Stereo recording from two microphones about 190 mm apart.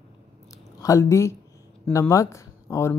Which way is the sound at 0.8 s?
15° left (ahead or behind).